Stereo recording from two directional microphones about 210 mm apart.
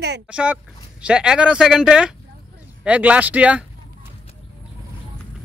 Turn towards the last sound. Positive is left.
turn(degrees=-5)  # may be behind; listen again after turning